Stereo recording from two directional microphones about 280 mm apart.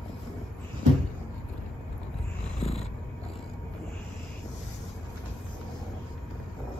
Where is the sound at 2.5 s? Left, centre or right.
Left.